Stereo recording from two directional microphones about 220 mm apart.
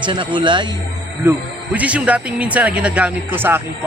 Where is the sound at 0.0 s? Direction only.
20° right (ahead or behind).